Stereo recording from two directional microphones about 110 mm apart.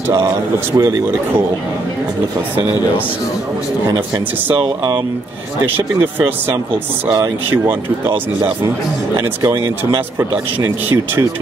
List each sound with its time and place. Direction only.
0.7 s speech: 25° right (ahead or behind)
5.8 s speech: 15° right (ahead or behind)
7.5 s speech: 20° right (ahead or behind)
8.1 s speech: 40° right (ahead or behind); by 10.7 s 25° right (ahead or behind)